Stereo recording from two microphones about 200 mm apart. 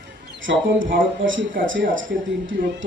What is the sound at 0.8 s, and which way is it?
Speech, 45° right (ahead or behind).